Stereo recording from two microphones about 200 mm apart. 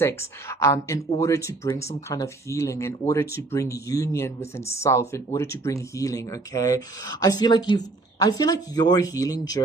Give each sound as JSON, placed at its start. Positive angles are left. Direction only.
{"t": 0.0, "sound": "speech", "side_deg": 15}